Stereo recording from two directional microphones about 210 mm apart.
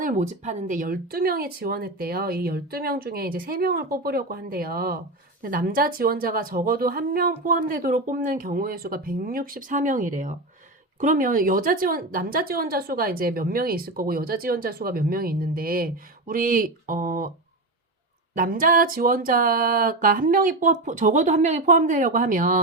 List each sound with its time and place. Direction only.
0.0 s a woman's voice: 35° right (ahead or behind)
18.3 s speech: 40° right (ahead or behind)